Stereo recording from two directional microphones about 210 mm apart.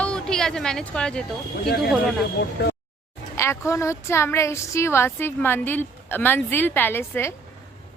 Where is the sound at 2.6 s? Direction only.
50° left (ahead or behind).